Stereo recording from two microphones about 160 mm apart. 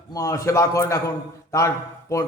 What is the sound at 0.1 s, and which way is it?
A man's voice, 20° left (ahead or behind).